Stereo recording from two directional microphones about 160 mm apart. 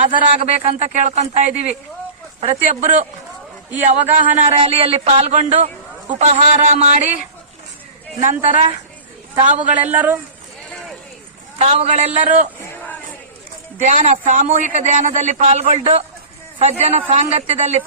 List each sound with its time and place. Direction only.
0.0 s a man's voice: 40° right (ahead or behind)
4.6 s a man's voice: 35° right (ahead or behind)
8.2 s a man's voice: 45° right (ahead or behind)
9.8 s speech: 10° right (ahead or behind)
11.5 s a man's voice: 40° right (ahead or behind)
12.6 s a sound: 10° left (ahead or behind)
13.7 s a man's voice: 50° right (ahead or behind)